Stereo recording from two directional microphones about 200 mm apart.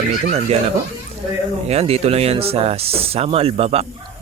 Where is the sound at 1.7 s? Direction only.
30° right (ahead or behind).